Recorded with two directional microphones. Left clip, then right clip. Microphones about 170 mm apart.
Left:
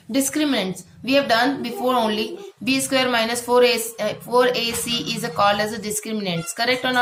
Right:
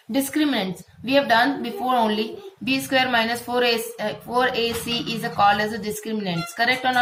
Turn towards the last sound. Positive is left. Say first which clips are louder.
# even
turn(degrees=20)  # may be behind; listen again after turning